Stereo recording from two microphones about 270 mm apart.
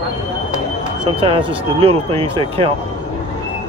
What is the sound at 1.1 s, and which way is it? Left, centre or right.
Speech, centre.